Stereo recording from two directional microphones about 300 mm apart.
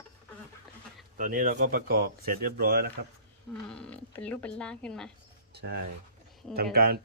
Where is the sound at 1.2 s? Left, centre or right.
Right.